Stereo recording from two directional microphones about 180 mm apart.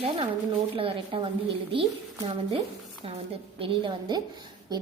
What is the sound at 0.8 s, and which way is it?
A woman's voice, 30° right (ahead or behind).